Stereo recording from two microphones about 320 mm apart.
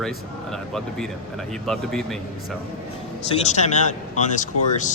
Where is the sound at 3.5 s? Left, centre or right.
Left.